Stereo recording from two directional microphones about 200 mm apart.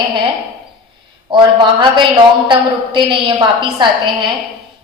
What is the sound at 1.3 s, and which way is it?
A woman's voice, 25° right (ahead or behind).